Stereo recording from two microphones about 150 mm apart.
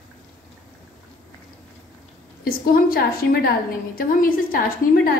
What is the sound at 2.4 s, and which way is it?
A woman's voice, 80° left.